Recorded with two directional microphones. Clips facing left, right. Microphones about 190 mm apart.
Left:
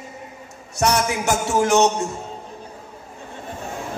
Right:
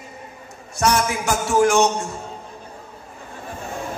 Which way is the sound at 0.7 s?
20° left (ahead or behind).